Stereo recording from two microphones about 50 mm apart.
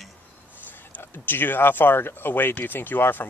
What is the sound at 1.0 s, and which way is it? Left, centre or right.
Speech, left.